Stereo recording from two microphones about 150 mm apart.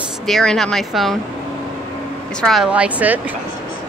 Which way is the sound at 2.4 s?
Centre (ahead or behind).